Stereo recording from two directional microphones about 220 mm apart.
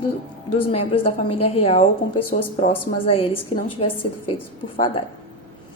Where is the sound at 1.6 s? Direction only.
25° left (ahead or behind).